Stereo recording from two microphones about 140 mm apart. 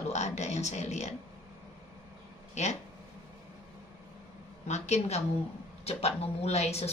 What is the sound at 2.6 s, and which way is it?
Speech, 55° left (ahead or behind).